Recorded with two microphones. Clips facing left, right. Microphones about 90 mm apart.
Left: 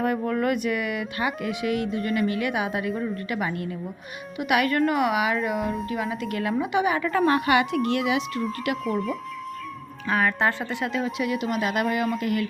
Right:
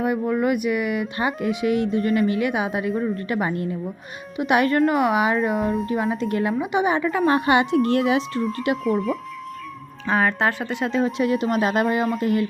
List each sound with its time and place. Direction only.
0.0 s speech: 15° right (ahead or behind)
8.8 s speech: centre (ahead or behind)
10.1 s speech: 20° right (ahead or behind)
11.0 s speech: 35° right (ahead or behind)